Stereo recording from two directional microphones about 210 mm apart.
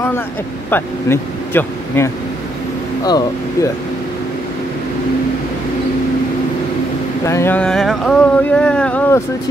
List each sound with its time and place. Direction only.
0.7 s speech: 10° left (ahead or behind)
3.1 s speech: 20° left (ahead or behind)
7.2 s speech: 10° left (ahead or behind)